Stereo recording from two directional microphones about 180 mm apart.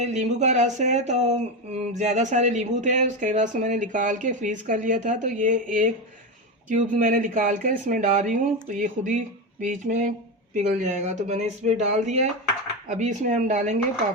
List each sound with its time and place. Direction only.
0.0 s speech: 40° right (ahead or behind)